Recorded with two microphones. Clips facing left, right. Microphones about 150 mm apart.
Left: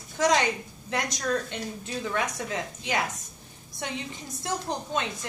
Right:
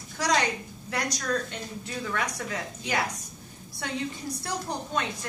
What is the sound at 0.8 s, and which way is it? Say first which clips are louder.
A woman's voice: left 1 dB; 25° left (ahead or behind).